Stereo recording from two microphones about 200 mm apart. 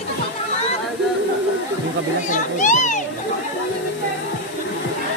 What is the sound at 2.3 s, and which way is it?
Children playing, 40° left (ahead or behind).